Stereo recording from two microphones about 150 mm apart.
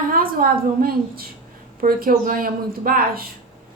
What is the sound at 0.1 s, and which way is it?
A woman's voice, 70° right (ahead or behind).